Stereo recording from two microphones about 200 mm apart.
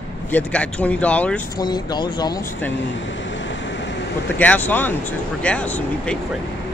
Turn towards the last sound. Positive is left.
turn(degrees=5)  # may be behind; listen again after turning